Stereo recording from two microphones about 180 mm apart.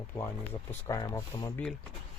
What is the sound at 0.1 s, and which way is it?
Speech, 15° left (ahead or behind).